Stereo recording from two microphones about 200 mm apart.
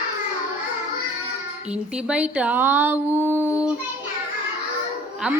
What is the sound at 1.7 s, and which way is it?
Speech, 5° right (ahead or behind).